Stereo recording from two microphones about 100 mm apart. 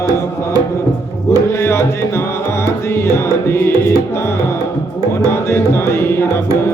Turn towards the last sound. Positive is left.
turn(degrees=25)  # may be behind; listen again after turning